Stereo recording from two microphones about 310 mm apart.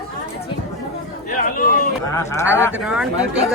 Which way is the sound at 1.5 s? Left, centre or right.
Left.